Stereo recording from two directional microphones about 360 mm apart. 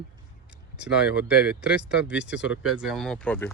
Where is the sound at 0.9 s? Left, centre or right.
Left.